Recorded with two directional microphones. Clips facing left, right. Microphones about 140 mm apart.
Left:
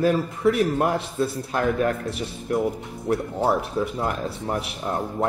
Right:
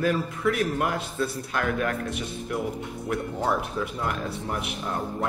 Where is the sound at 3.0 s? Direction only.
35° left (ahead or behind).